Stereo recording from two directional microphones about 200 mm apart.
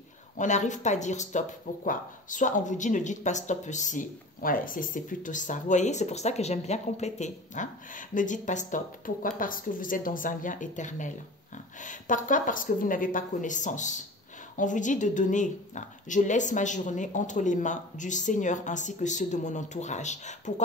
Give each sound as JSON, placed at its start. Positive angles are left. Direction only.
{"t": 0.4, "sound": "a woman's voice", "side_deg": 35}